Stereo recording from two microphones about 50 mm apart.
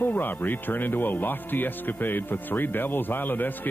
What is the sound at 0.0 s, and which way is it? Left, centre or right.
Speech, left.